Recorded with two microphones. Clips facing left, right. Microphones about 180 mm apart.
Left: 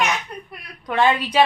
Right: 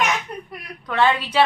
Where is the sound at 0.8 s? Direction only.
15° left (ahead or behind).